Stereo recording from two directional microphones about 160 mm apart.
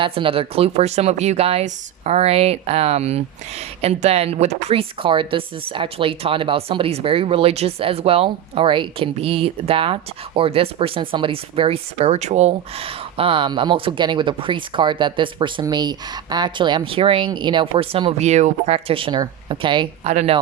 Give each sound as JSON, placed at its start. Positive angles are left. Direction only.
{"t": 0.0, "sound": "speech", "side_deg": -35}
{"t": 20.1, "sound": "speech", "side_deg": -40}